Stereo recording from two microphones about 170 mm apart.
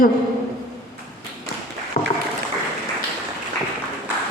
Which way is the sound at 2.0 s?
40° left (ahead or behind).